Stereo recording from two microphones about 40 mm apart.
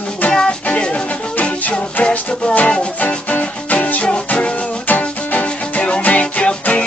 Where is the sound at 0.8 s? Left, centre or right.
Left.